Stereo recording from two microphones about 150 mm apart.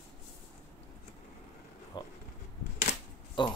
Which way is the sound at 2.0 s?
30° left (ahead or behind).